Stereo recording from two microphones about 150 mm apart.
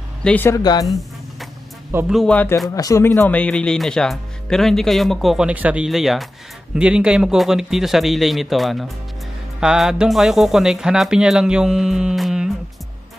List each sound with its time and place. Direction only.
0.2 s speech: 10° left (ahead or behind)
0.6 s a woman's voice: 25° left (ahead or behind)
0.8 s music: centre (ahead or behind)
2.0 s speech: centre (ahead or behind)
2.3 s speech: 15° left (ahead or behind); by 12.4 s 5° right (ahead or behind)